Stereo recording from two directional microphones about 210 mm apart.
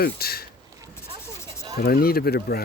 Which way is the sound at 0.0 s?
45° left (ahead or behind).